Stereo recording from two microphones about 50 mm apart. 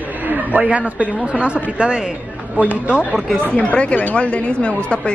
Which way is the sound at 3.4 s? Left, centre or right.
Left.